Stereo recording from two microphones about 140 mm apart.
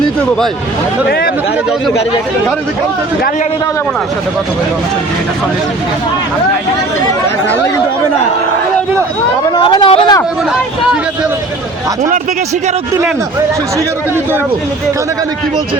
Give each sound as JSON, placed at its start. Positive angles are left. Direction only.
{"t": 9.6, "sound": "speech", "side_deg": 35}